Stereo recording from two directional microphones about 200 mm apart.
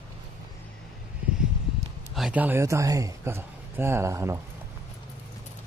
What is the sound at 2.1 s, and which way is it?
Speech, 5° right (ahead or behind).